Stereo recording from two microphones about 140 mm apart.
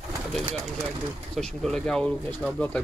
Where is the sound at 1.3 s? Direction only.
5° left (ahead or behind).